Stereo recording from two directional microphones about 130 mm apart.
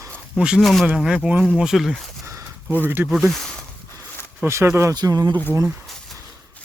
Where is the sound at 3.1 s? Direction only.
Centre (ahead or behind).